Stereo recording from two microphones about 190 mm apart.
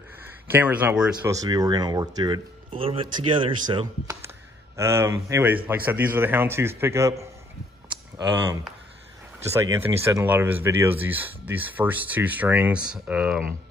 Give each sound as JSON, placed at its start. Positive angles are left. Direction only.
{"t": 0.5, "sound": "speech", "side_deg": -10}
{"t": 1.1, "sound": "speech", "side_deg": -20}
{"t": 9.5, "sound": "speech", "side_deg": -15}